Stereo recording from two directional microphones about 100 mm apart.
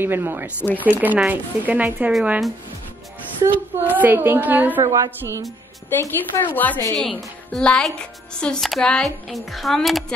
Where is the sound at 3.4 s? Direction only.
20° right (ahead or behind).